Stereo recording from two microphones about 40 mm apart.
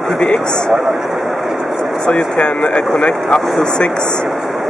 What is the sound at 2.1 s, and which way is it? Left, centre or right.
Speech, left.